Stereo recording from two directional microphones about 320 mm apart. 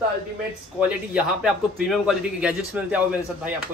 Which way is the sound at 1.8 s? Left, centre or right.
Centre.